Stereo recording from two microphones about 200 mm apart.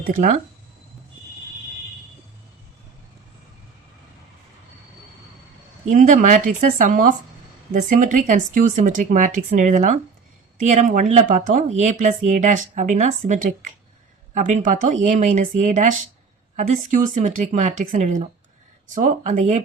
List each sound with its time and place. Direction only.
0.2 s speech: 35° right (ahead or behind)
5.8 s speech: 40° right (ahead or behind)